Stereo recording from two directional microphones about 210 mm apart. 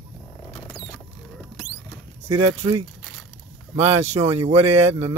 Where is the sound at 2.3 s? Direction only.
30° right (ahead or behind).